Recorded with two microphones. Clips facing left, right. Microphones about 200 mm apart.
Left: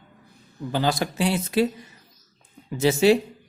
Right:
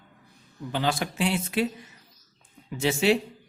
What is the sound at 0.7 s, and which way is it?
Speech, 40° left (ahead or behind).